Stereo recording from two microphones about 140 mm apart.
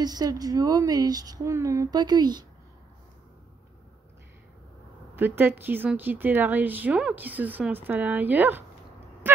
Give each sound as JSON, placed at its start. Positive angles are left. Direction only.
{"t": 0.0, "sound": "speech", "side_deg": -30}
{"t": 5.1, "sound": "speech", "side_deg": -15}